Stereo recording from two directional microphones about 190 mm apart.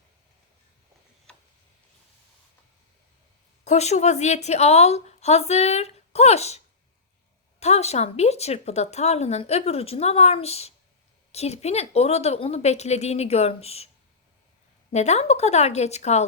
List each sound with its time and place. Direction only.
3.6 s speech: 35° left (ahead or behind)
7.6 s speech: 35° left (ahead or behind)
14.9 s speech: 35° left (ahead or behind)